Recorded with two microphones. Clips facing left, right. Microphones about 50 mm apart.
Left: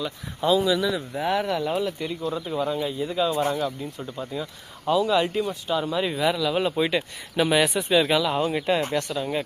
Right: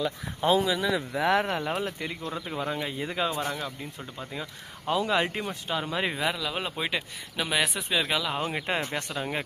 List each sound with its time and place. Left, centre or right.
0.4 s speech: right
0.9 s speech: right
1.5 s speech: right
2.8 s speech: right
4.9 s speech: right
6.2 s speech: centre
7.3 s speech: centre
8.5 s speech: right